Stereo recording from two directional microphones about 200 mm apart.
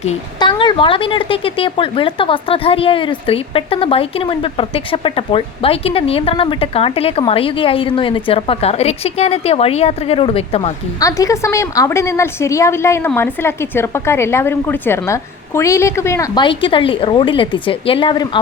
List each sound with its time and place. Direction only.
0.3 s a woman's voice: 25° left (ahead or behind)
11.0 s a woman's voice: 15° left (ahead or behind)